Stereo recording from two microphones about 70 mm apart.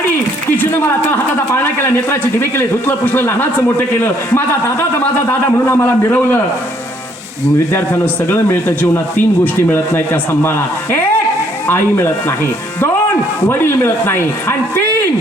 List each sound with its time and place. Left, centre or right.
0.5 s a man's voice: left
7.7 s a man's voice: left
9.7 s speech: left
13.5 s speech: left